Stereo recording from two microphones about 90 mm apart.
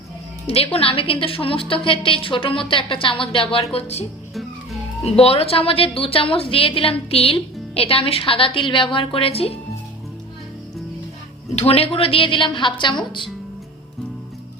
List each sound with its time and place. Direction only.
0.4 s a woman's voice: 90° left
5.1 s a woman's voice: 90° left
11.6 s a woman's voice: 90° left; by 12.9 s 65° left (ahead or behind)